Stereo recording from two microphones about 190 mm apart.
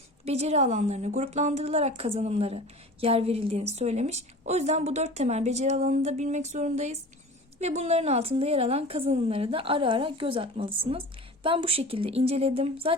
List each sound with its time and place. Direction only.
0.3 s a woman's voice: 35° right (ahead or behind)